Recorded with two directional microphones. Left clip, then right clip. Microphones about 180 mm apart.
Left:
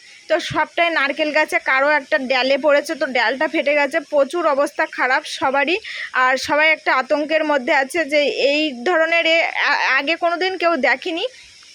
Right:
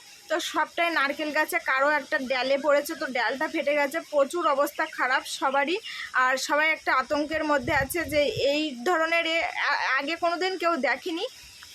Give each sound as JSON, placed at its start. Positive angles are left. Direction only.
{"t": 0.3, "sound": "speech", "side_deg": 20}